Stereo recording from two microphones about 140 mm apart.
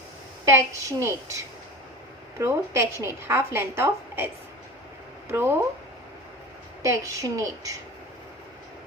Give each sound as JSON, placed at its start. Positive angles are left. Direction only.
{"t": 0.4, "sound": "a woman's voice", "side_deg": -20}
{"t": 5.3, "sound": "a woman's voice", "side_deg": -15}
{"t": 6.8, "sound": "a woman's voice", "side_deg": -25}